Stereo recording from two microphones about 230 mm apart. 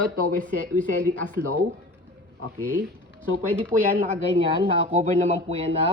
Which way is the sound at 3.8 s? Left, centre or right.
Right.